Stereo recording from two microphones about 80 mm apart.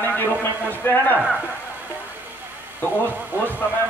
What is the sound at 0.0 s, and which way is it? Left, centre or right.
A man's voice, left.